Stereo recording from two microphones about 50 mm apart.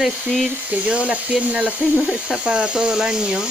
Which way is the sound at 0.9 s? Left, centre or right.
Right.